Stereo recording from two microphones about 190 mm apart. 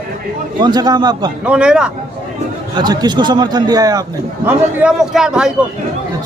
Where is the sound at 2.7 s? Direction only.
20° right (ahead or behind).